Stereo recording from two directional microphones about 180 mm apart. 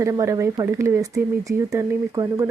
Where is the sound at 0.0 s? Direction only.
15° right (ahead or behind).